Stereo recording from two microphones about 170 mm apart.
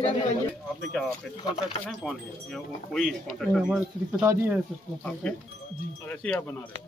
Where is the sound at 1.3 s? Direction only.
30° left (ahead or behind).